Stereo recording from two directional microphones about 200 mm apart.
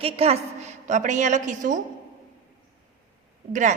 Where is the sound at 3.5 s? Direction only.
40° right (ahead or behind).